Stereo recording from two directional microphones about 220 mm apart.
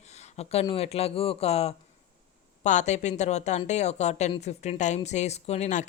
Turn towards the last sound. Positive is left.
turn(degrees=30)  # may be behind; listen again after turning